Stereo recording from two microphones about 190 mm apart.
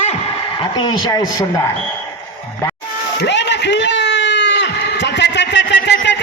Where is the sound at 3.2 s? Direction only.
65° left (ahead or behind).